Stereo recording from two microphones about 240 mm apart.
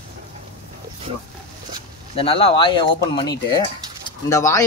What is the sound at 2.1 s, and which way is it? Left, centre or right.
Speech, left.